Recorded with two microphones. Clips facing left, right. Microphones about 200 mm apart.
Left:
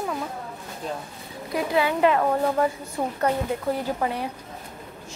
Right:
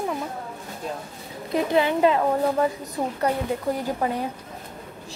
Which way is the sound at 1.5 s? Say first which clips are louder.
Right 2 dB; 25° right (ahead or behind).